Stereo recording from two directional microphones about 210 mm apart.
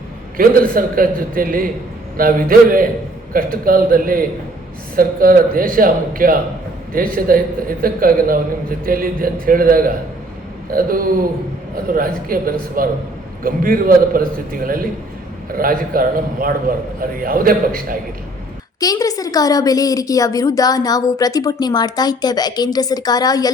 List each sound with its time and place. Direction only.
0.7 s a man's voice: 40° right (ahead or behind)
18.8 s a woman's voice: 15° left (ahead or behind)